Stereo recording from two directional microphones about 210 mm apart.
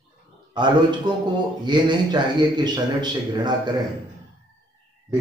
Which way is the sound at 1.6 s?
20° right (ahead or behind).